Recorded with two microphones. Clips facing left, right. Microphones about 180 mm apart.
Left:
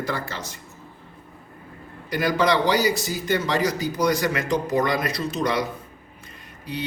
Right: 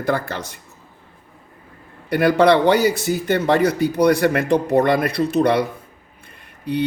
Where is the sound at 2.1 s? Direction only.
65° right (ahead or behind).